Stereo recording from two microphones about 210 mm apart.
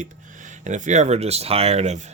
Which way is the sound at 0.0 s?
35° right (ahead or behind).